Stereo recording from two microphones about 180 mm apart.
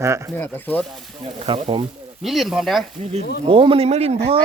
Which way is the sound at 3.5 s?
30° right (ahead or behind).